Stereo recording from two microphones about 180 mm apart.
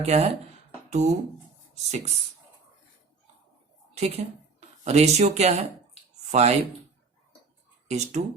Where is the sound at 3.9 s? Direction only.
35° right (ahead or behind).